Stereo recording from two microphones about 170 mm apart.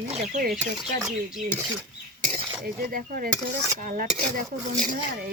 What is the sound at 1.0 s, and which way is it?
Speech, 5° right (ahead or behind).